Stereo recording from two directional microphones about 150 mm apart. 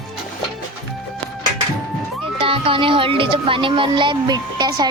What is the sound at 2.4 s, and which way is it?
Speech, 35° right (ahead or behind).